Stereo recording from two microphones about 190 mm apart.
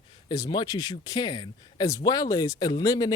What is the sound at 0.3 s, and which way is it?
Speech, 20° left (ahead or behind).